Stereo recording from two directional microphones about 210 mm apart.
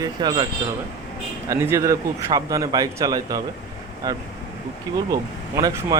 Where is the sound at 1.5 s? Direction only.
10° right (ahead or behind).